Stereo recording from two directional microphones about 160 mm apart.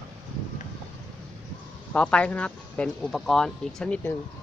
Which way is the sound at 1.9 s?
10° left (ahead or behind).